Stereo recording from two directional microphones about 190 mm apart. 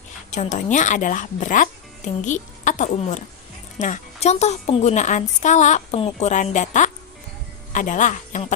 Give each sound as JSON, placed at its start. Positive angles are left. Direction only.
{"t": 0.5, "sound": "a woman's voice", "side_deg": 40}